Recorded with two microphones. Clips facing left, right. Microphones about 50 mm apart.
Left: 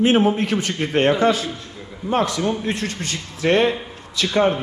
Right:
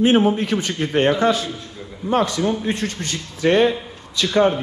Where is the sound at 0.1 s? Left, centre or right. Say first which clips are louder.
Right 1 dB; left.